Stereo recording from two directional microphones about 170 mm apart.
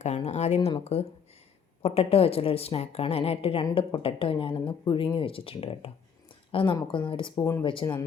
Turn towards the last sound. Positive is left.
turn(degrees=30)  # may be behind; listen again after turning